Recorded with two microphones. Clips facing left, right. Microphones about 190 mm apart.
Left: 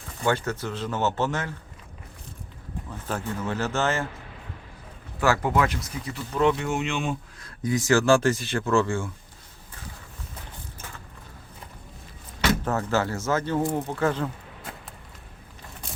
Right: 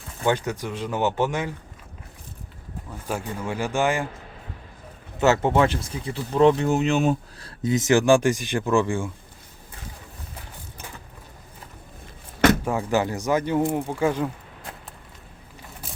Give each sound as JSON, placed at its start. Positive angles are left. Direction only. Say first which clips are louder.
{"t": 0.3, "sound": "speech", "louder": "right 2 dB", "side_deg": -15}
{"t": 3.1, "sound": "speech", "louder": "right 1 dB", "side_deg": -10}
{"t": 5.2, "sound": "speech", "louder": "right 4 dB", "side_deg": -25}
{"t": 7.6, "sound": "speech", "louder": "right 2 dB", "side_deg": -20}
{"t": 12.6, "sound": "speech", "louder": "right 2 dB", "side_deg": -15}